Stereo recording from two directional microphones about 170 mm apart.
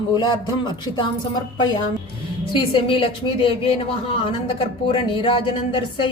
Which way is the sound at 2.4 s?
30° left (ahead or behind).